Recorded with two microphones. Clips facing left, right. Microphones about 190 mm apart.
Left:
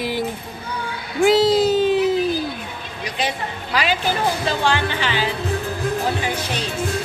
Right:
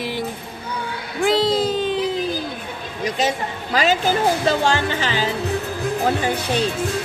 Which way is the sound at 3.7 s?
45° right (ahead or behind).